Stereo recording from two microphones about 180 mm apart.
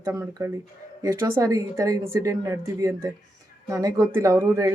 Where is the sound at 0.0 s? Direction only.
15° right (ahead or behind).